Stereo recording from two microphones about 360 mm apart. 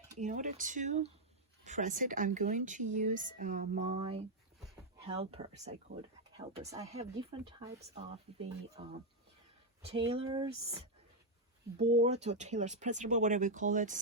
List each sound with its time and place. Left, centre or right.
0.2 s speech: right
8.8 s speech: centre
11.8 s speech: centre